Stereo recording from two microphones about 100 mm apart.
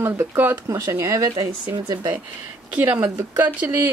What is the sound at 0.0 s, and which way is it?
A woman's voice, 20° right (ahead or behind).